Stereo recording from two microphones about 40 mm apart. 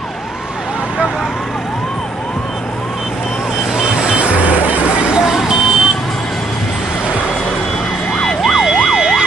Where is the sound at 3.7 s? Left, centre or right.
Centre.